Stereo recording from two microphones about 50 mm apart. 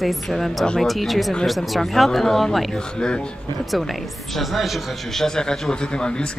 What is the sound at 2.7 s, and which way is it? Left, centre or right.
Speech, centre.